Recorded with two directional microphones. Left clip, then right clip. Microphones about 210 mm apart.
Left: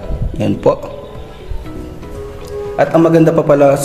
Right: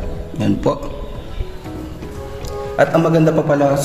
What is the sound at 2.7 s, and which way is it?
A man's voice, 15° left (ahead or behind).